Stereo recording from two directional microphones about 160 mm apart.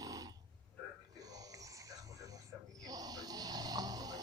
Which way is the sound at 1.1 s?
25° right (ahead or behind).